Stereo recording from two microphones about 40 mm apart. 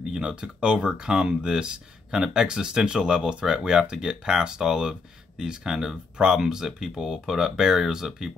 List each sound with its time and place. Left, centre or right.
0.0 s speech: centre